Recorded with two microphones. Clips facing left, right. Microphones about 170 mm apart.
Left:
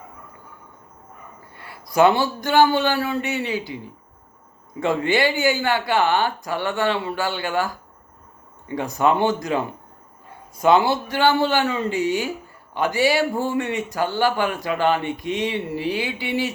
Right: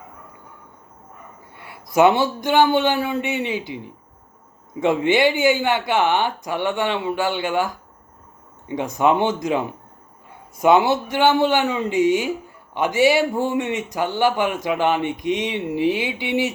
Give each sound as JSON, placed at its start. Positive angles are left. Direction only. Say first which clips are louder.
{"t": 1.6, "sound": "a man's voice", "louder": "right 1 dB", "side_deg": -20}
{"t": 5.0, "sound": "a man's voice", "louder": "right 3 dB", "side_deg": -20}